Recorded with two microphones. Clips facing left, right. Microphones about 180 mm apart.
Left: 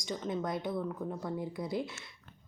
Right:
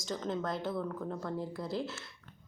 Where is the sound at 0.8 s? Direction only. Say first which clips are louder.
Even; 10° left (ahead or behind).